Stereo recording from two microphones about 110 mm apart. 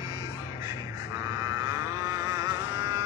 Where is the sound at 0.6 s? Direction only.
30° right (ahead or behind).